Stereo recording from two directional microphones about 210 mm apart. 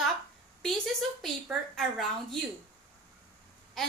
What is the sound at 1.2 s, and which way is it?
A woman's voice, centre (ahead or behind).